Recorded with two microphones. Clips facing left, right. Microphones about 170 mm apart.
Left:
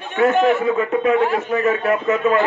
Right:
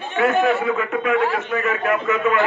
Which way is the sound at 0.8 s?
30° left (ahead or behind).